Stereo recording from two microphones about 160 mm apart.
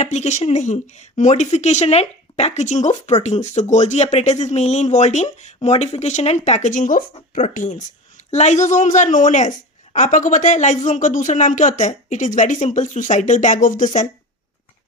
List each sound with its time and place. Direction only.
0.0 s a woman's voice: 45° left (ahead or behind)